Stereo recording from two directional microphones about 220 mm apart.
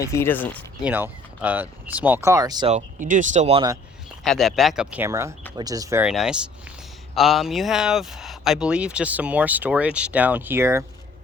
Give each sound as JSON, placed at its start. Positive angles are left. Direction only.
{"t": 0.0, "sound": "speech", "side_deg": 10}
{"t": 0.8, "sound": "speech", "side_deg": -5}
{"t": 2.7, "sound": "speech", "side_deg": -35}
{"t": 4.2, "sound": "speech", "side_deg": 0}